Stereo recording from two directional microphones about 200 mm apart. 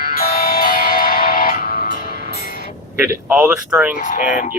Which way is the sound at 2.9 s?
10° right (ahead or behind).